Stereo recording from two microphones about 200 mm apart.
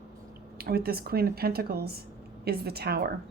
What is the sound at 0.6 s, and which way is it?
A woman's voice, 50° right (ahead or behind).